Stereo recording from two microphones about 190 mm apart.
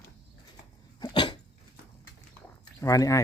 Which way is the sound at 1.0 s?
25° left (ahead or behind).